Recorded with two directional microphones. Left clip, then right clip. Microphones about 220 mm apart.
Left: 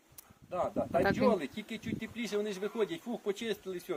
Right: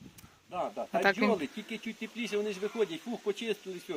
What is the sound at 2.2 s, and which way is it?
Speech, 20° left (ahead or behind).